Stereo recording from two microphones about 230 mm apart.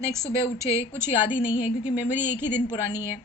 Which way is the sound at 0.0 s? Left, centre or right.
Centre.